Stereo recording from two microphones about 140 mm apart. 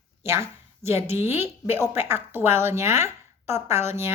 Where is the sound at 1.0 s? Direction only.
15° right (ahead or behind).